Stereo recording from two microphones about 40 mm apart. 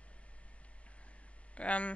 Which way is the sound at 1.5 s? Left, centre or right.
Left.